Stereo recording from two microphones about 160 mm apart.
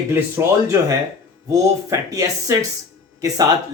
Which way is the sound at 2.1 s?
20° right (ahead or behind).